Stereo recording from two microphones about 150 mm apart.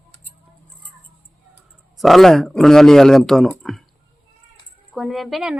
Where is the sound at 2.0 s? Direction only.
Centre (ahead or behind).